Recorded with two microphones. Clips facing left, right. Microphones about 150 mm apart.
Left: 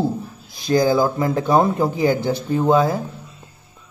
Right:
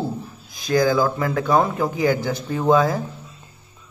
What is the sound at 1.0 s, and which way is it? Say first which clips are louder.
Speech: left 2 dB; 20° left (ahead or behind).